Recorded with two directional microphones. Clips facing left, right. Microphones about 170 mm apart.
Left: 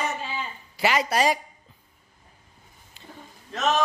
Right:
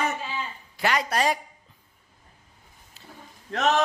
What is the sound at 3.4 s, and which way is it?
Speech, 65° right (ahead or behind).